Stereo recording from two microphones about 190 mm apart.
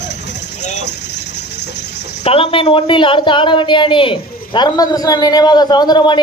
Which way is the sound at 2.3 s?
30° left (ahead or behind).